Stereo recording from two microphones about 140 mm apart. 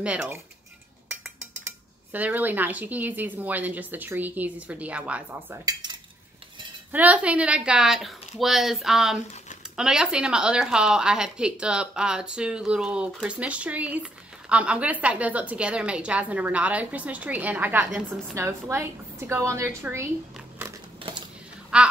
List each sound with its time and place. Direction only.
0.0 s speech: 10° right (ahead or behind)
2.1 s speech: 10° right (ahead or behind)
5.7 s cutlery: 30° right (ahead or behind)
6.9 s speech: 10° right (ahead or behind)
17.8 s speech: centre (ahead or behind)
18.3 s a woman's voice: 20° right (ahead or behind)
21.7 s a sound: 5° right (ahead or behind)